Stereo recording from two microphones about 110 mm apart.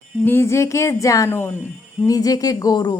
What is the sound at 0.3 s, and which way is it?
Speech, 25° left (ahead or behind).